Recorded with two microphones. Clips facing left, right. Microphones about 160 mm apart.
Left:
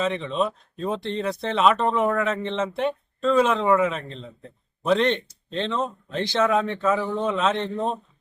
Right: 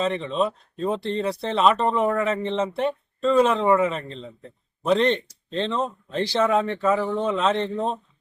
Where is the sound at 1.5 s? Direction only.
Centre (ahead or behind).